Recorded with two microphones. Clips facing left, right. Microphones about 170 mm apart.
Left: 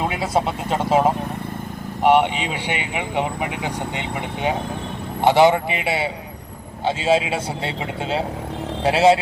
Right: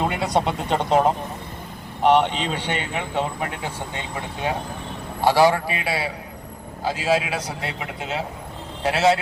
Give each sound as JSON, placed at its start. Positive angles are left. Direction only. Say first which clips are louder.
{"t": 0.0, "sound": "speech", "louder": "even", "side_deg": 0}
{"t": 5.2, "sound": "speech", "louder": "left 3 dB", "side_deg": 20}
{"t": 8.8, "sound": "speech", "louder": "left 4 dB", "side_deg": 30}